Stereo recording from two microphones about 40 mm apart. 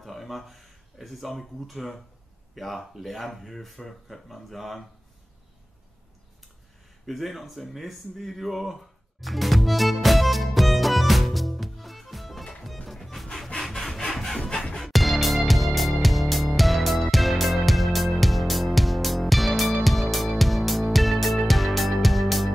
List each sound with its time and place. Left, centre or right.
0.0 s speech: centre
7.1 s speech: centre
9.2 s music: centre
13.6 s wood: centre
14.4 s music: left
14.8 s music: centre